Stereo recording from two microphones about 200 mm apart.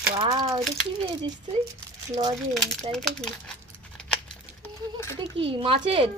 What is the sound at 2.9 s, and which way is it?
Speech, centre (ahead or behind).